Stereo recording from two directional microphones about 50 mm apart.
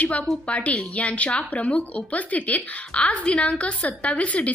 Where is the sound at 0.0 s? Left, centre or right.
Left.